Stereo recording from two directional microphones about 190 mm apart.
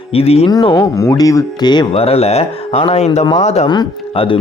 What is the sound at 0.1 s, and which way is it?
Speech, 30° left (ahead or behind).